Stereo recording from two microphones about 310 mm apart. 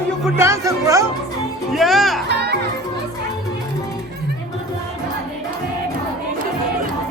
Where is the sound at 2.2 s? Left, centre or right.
Right.